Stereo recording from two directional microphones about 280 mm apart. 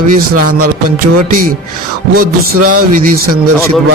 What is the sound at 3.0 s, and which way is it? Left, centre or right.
Speech, right.